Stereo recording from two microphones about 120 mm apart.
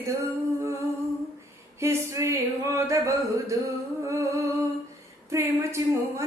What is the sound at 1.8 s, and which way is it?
A woman's voice, 25° right (ahead or behind).